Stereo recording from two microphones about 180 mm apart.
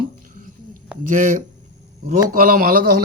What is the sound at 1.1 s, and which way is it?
A man's voice, 45° right (ahead or behind).